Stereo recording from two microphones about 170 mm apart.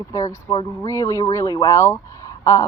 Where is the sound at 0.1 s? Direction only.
20° left (ahead or behind).